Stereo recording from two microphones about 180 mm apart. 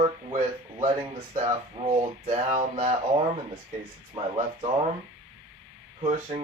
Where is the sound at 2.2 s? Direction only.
40° right (ahead or behind).